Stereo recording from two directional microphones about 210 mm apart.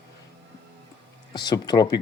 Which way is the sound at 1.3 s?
20° left (ahead or behind).